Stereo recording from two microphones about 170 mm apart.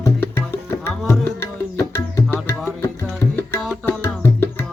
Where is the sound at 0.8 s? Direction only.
15° left (ahead or behind).